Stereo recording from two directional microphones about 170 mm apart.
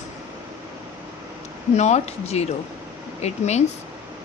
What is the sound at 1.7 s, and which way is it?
Speech, 40° left (ahead or behind).